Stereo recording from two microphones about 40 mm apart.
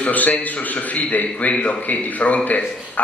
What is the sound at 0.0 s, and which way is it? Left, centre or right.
A man's voice, left.